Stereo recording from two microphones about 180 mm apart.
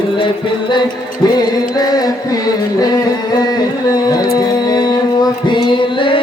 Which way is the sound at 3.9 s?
20° left (ahead or behind).